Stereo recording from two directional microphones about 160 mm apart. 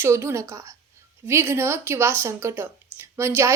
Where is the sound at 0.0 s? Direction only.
15° right (ahead or behind).